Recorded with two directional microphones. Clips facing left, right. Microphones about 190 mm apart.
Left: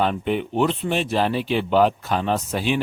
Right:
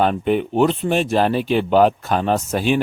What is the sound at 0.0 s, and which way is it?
Speech, 45° right (ahead or behind).